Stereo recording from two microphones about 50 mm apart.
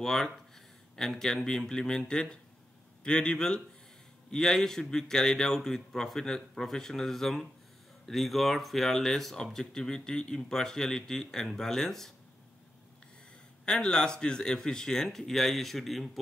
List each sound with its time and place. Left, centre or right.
0.0 s speech: centre
13.7 s speech: centre